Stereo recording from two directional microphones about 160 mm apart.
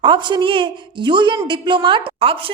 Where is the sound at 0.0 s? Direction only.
30° right (ahead or behind).